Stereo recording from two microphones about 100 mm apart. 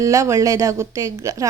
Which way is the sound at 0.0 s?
30° right (ahead or behind).